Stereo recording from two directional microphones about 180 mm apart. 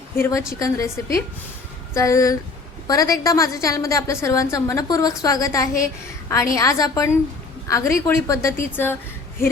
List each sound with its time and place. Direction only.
0.2 s a woman's voice: 15° left (ahead or behind)